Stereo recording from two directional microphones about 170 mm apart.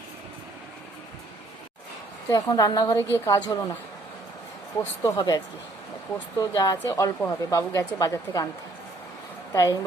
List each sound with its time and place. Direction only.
2.3 s speech: 20° left (ahead or behind)
4.8 s speech: 20° left (ahead or behind)
6.4 s speech: 20° left (ahead or behind)
9.5 s speech: 20° left (ahead or behind)